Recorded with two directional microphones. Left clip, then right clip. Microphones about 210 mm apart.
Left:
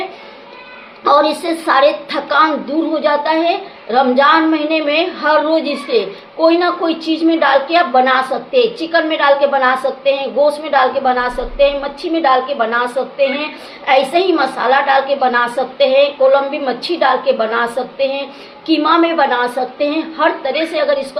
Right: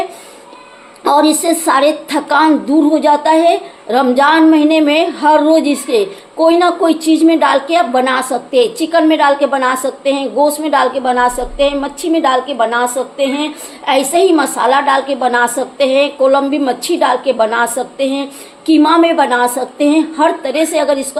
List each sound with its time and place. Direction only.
1.0 s a woman's voice: 40° right (ahead or behind)